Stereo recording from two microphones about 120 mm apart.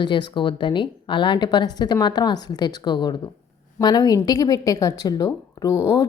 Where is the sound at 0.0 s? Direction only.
40° left (ahead or behind).